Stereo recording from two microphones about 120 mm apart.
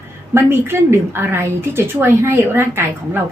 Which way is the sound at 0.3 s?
20° right (ahead or behind).